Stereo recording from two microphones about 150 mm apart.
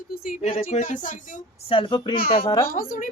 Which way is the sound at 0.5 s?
65° left (ahead or behind).